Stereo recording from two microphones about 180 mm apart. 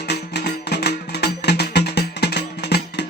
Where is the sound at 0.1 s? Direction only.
65° left (ahead or behind).